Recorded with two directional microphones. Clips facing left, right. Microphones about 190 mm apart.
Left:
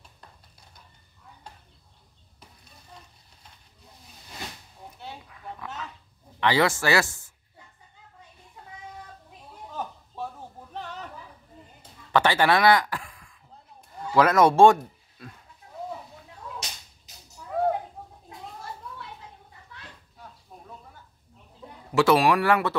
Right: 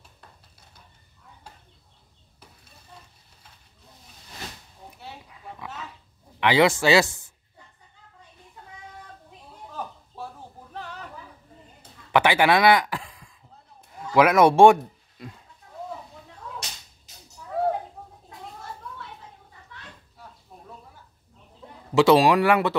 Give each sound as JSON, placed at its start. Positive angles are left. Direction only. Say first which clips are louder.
{"t": 5.2, "sound": "dog", "louder": "left 1 dB", "side_deg": -20}
{"t": 6.4, "sound": "speech", "louder": "right 3 dB", "side_deg": -15}
{"t": 11.8, "sound": "a sound", "louder": "right 2 dB", "side_deg": -15}
{"t": 13.9, "sound": "speech", "louder": "right 2 dB", "side_deg": -10}
{"t": 15.6, "sound": "a sound", "louder": "left 1 dB", "side_deg": 25}
{"t": 21.9, "sound": "speech", "louder": "right 3 dB", "side_deg": -20}